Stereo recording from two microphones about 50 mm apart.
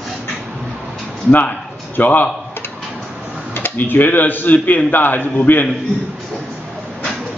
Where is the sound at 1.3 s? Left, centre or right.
Left.